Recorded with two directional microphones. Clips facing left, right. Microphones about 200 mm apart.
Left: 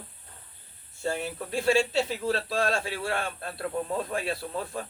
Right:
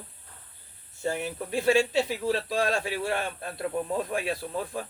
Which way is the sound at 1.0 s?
15° right (ahead or behind).